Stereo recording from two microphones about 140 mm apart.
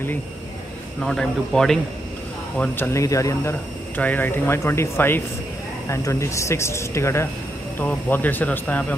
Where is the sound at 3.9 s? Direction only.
10° left (ahead or behind).